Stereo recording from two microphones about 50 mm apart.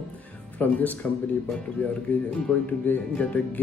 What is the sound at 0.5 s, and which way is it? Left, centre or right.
Speech, left.